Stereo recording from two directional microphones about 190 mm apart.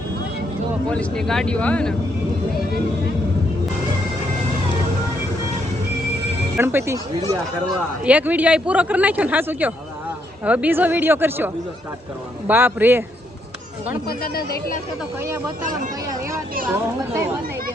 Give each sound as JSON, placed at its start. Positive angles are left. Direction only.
{"t": 0.9, "sound": "speech", "side_deg": 5}
{"t": 6.6, "sound": "a man's voice", "side_deg": -10}
{"t": 14.1, "sound": "speech", "side_deg": 50}